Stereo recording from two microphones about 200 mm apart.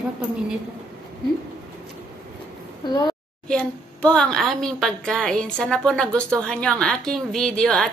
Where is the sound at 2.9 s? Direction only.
20° left (ahead or behind).